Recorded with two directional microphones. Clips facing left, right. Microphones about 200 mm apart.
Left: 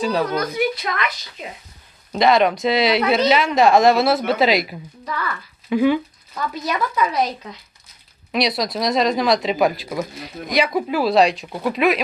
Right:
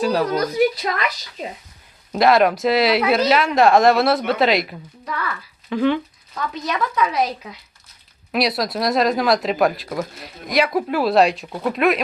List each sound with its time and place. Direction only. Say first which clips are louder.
0.0 s speech: right 1 dB; centre (ahead or behind)
0.3 s a woman's voice: right 3 dB; 35° right (ahead or behind)
2.1 s speech: right 1 dB; 5° right (ahead or behind)
5.6 s speech: left 2 dB; 10° left (ahead or behind)